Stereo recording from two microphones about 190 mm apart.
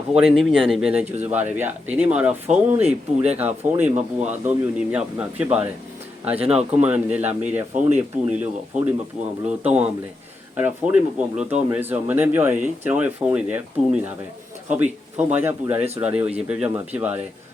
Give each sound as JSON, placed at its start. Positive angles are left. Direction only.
{"t": 0.2, "sound": "speech", "side_deg": -5}
{"t": 1.0, "sound": "speech", "side_deg": -35}
{"t": 1.3, "sound": "speech", "side_deg": -10}
{"t": 6.3, "sound": "speech", "side_deg": -30}
{"t": 6.8, "sound": "speech", "side_deg": -5}